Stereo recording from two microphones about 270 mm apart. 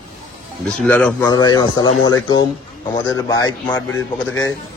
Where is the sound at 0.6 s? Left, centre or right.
Centre.